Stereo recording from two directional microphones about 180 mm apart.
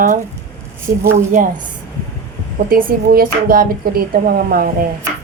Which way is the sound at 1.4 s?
50° right (ahead or behind).